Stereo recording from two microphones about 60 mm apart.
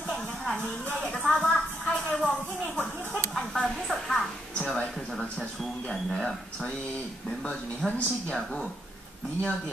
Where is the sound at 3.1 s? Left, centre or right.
Centre.